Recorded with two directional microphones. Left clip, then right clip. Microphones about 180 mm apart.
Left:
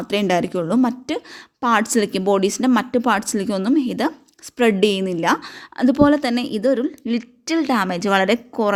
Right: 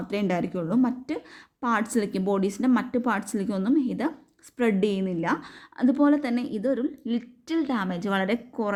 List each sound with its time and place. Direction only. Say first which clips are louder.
0.1 s a woman's voice: left 9 dB; 40° left (ahead or behind)